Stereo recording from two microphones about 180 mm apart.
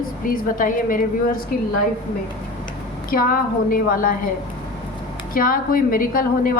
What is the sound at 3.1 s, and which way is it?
A woman's voice, 55° left (ahead or behind).